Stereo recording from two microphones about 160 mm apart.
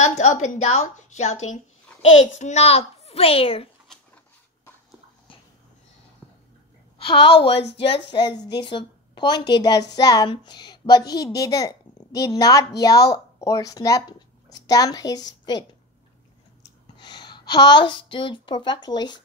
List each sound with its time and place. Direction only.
0.0 s a woman's voice: 45° left (ahead or behind)
7.0 s a woman's voice: 35° left (ahead or behind)
16.9 s a woman's voice: 25° left (ahead or behind)